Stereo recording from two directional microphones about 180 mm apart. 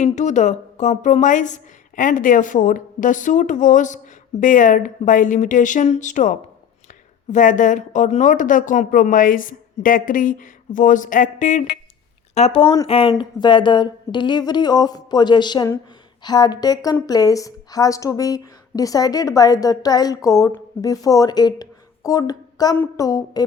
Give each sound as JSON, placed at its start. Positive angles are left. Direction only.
{"t": 0.0, "sound": "a woman's voice", "side_deg": 40}
{"t": 12.6, "sound": "speech", "side_deg": 15}
{"t": 12.9, "sound": "a woman's voice", "side_deg": 30}